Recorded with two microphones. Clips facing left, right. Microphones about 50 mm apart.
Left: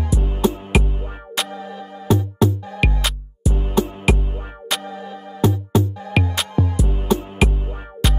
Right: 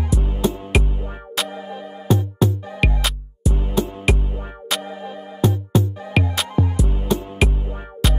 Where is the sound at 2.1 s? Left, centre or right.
Centre.